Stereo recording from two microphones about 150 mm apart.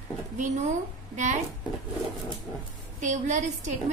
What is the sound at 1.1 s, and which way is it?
Speech, 55° right (ahead or behind).